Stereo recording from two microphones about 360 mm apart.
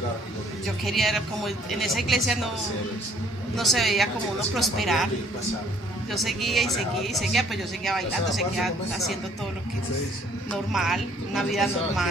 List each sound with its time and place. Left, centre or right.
0.8 s speech: centre
3.5 s speech: centre
6.1 s speech: centre
10.5 s speech: centre